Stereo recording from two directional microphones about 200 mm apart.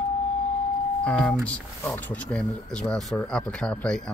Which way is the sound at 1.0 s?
5° left (ahead or behind).